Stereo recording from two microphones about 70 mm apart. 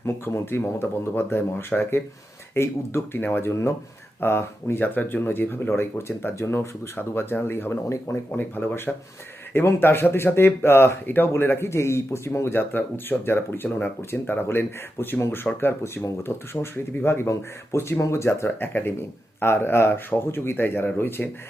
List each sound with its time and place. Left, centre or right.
0.0 s speech: left
3.5 s speech: left
15.5 s speech: centre
16.2 s speech: left